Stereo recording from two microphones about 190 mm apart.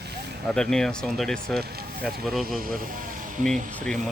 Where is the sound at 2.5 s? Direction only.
50° right (ahead or behind).